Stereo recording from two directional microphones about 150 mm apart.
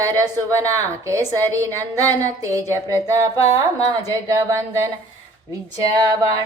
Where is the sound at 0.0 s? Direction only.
20° right (ahead or behind).